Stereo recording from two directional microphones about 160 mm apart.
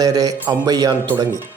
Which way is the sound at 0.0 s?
25° right (ahead or behind).